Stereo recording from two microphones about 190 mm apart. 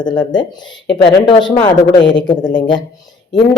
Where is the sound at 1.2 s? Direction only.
25° left (ahead or behind).